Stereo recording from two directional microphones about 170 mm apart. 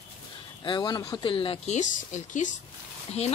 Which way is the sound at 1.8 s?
45° left (ahead or behind).